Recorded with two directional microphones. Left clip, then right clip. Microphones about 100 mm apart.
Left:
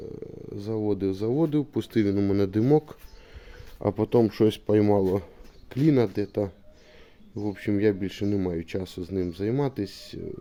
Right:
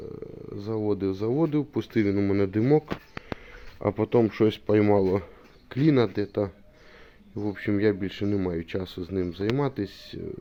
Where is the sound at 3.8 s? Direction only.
55° left (ahead or behind); by 10.2 s 40° left (ahead or behind).